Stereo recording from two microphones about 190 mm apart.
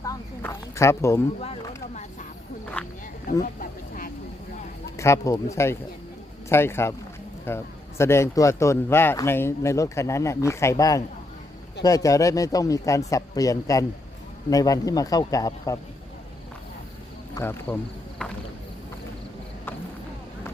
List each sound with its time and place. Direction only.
0.0 s snake: 15° left (ahead or behind)
2.8 s a sound: 10° left (ahead or behind)
3.4 s a sound: 45° left (ahead or behind)
4.9 s speech: 15° left (ahead or behind)
17.3 s speech: 10° left (ahead or behind)
18.2 s clip-clop: 5° left (ahead or behind)